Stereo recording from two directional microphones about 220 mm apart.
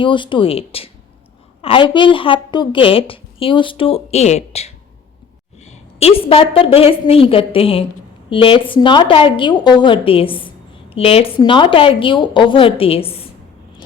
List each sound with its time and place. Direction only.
0.0 s a woman's voice: 20° left (ahead or behind)